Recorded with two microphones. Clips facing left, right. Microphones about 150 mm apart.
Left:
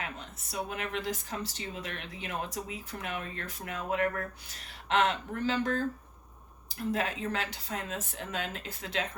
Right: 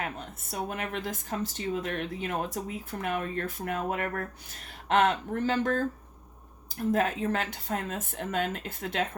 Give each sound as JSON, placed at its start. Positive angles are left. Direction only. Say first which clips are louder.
{"t": 0.0, "sound": "speech", "louder": "right 5 dB", "side_deg": -50}
{"t": 6.9, "sound": "speech", "louder": "right 5 dB", "side_deg": -45}